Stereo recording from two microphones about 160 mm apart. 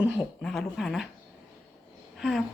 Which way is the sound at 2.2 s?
Centre (ahead or behind).